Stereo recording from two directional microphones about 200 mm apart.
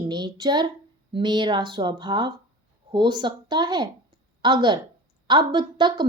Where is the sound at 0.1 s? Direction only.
20° right (ahead or behind).